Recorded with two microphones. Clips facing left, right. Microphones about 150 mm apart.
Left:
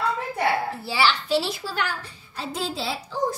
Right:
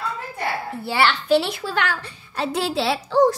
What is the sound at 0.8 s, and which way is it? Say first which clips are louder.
A woman's voice: right 6 dB; 55° right (ahead or behind).